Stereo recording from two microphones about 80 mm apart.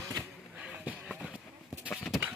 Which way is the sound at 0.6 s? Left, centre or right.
Centre.